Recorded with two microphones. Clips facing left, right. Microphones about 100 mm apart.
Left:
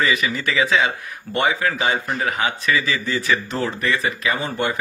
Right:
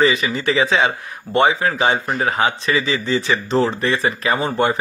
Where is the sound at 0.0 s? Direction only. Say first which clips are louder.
Right 4 dB; 25° right (ahead or behind).